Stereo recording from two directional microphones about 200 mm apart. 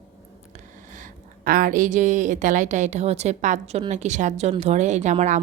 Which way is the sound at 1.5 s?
45° right (ahead or behind).